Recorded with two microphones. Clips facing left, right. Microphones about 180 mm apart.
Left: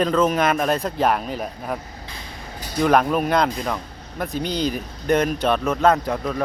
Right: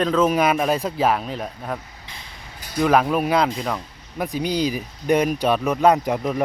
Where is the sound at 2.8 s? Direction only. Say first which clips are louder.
Even; 5° right (ahead or behind).